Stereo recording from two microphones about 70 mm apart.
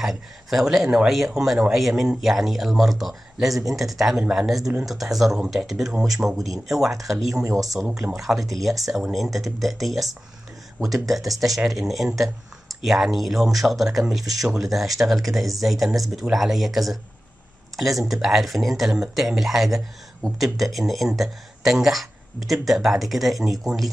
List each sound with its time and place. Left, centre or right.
0.0 s speech: centre
7.4 s speech: right
7.9 s speech: centre